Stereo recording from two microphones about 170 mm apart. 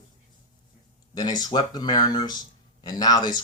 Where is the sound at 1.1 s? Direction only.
25° left (ahead or behind).